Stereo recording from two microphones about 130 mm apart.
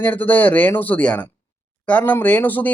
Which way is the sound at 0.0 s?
15° left (ahead or behind).